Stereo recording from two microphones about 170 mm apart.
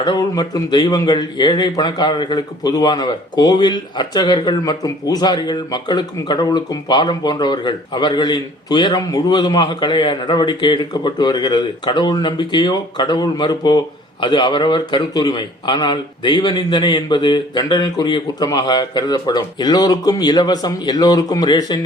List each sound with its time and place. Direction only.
0.0 s speech: 20° left (ahead or behind)